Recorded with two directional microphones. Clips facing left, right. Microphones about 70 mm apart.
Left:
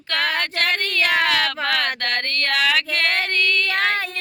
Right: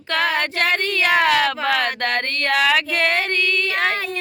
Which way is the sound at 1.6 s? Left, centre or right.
Centre.